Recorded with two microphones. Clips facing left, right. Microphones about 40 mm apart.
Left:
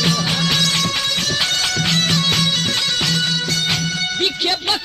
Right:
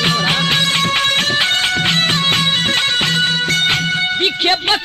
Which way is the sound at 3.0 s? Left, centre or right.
Right.